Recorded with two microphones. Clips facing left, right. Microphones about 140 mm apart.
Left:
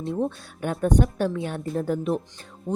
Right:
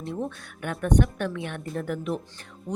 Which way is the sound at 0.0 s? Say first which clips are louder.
Left 5 dB; 30° left (ahead or behind).